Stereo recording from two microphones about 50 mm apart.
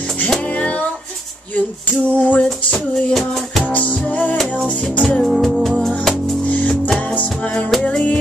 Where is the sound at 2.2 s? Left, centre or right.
Left.